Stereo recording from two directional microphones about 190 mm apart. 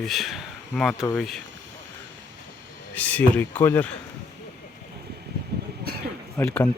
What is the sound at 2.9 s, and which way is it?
Speech, 5° left (ahead or behind).